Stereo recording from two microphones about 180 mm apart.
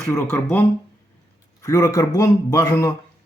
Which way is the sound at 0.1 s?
15° left (ahead or behind).